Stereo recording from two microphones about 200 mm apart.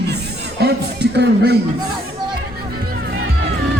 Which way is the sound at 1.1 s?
55° right (ahead or behind).